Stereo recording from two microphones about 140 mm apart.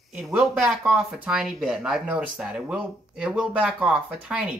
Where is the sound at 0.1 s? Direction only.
5° right (ahead or behind).